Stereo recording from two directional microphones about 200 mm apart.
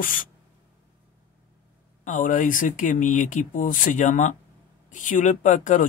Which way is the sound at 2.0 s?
40° left (ahead or behind).